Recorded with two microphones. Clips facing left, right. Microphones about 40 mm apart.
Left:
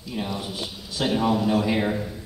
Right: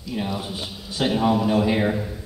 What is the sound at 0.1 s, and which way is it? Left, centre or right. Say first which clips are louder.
A man's voice: right 2 dB; centre.